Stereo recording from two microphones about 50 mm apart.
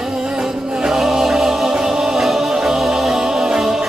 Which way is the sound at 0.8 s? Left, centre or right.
Centre.